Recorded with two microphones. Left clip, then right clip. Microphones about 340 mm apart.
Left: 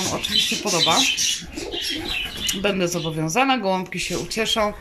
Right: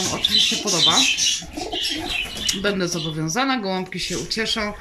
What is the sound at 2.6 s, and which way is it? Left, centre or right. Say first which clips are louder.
Speech: left 1 dB; centre.